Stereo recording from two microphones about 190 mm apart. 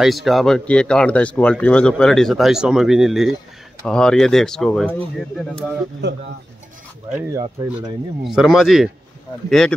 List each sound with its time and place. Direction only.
0.0 s speech: centre (ahead or behind)
6.0 s speech: 65° right (ahead or behind)
7.1 s speech: 15° right (ahead or behind)
8.2 s speech: centre (ahead or behind)